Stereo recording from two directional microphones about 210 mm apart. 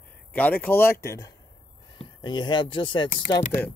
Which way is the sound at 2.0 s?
20° left (ahead or behind).